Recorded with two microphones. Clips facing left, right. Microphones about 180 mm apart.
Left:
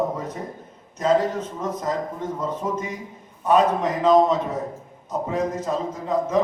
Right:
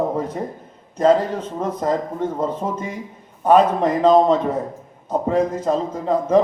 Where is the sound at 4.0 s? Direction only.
30° right (ahead or behind).